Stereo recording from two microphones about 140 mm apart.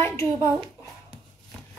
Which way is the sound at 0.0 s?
20° left (ahead or behind).